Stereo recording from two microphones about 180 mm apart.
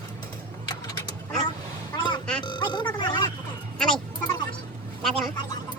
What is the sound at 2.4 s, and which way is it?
Speech, 25° left (ahead or behind).